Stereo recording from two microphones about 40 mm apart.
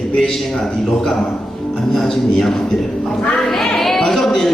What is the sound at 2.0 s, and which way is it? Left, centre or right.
Speech, centre.